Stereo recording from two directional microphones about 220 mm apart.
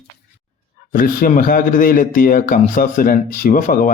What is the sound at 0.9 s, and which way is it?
Speech, 40° left (ahead or behind).